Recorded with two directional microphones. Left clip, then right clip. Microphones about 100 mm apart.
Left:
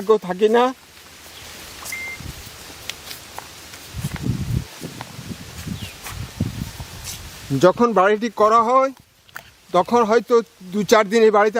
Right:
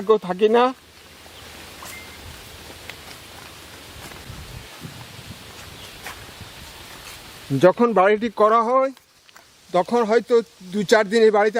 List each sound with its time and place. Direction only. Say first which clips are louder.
0.1 s speech: left 1 dB; 20° left (ahead or behind)
7.6 s speech: left 1 dB; 10° left (ahead or behind)
9.7 s speech: left 2 dB; 25° left (ahead or behind)